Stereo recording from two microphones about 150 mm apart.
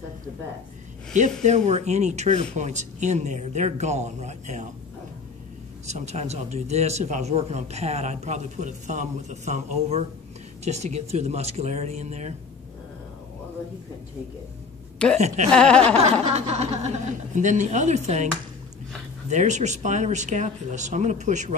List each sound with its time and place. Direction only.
1.4 s a man's voice: 50° right (ahead or behind)
5.9 s a man's voice: 50° right (ahead or behind)
15.1 s a man's voice: 50° right (ahead or behind)
15.5 s chuckle: 5° left (ahead or behind)
16.0 s a man's voice: 45° right (ahead or behind)